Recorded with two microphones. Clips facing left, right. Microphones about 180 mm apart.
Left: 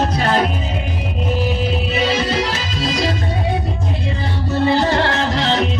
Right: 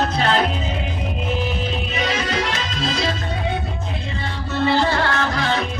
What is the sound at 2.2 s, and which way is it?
Music, 30° left (ahead or behind).